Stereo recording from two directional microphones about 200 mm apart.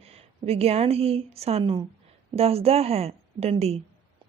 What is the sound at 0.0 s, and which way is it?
A woman's voice, 30° right (ahead or behind).